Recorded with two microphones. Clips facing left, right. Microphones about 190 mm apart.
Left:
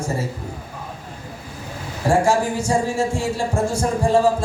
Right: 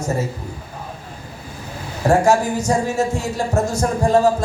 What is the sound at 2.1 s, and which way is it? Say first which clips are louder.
Speech: right 2 dB; 30° left (ahead or behind).